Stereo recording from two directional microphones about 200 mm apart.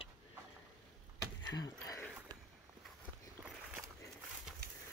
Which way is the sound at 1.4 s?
20° left (ahead or behind).